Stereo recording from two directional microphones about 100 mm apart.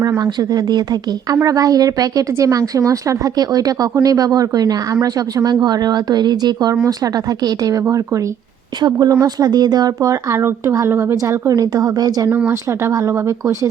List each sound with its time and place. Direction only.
0.2 s speech: 40° right (ahead or behind)
12.5 s speech: 30° right (ahead or behind)